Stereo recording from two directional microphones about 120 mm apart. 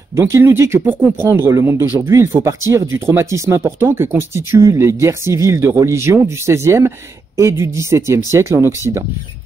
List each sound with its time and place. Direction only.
0.1 s speech: 20° right (ahead or behind)